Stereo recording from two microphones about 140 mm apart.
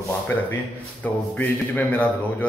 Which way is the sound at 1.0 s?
15° left (ahead or behind).